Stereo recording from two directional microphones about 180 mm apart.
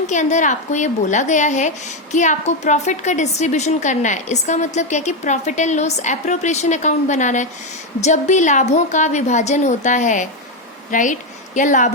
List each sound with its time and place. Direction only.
0.1 s a woman's voice: 40° left (ahead or behind)